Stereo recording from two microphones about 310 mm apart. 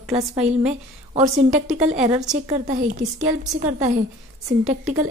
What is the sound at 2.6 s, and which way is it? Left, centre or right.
Speech, right.